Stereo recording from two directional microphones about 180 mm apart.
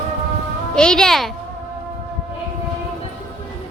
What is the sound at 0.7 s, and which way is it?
Speech, 5° left (ahead or behind).